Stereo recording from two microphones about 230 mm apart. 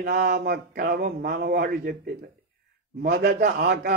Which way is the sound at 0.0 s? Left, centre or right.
Right.